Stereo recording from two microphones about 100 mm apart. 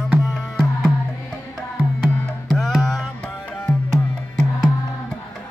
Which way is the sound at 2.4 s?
Centre (ahead or behind).